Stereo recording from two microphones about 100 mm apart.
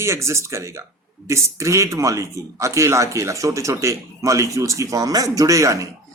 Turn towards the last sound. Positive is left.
turn(degrees=-30)  # may be behind; listen again after turning